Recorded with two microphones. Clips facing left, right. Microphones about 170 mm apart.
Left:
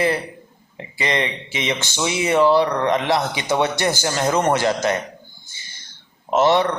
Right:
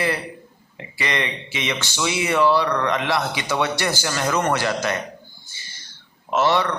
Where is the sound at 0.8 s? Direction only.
20° left (ahead or behind).